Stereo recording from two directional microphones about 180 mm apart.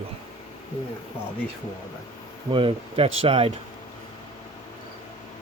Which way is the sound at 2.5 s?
30° right (ahead or behind).